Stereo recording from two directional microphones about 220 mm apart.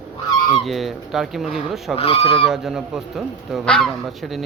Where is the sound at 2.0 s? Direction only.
25° left (ahead or behind).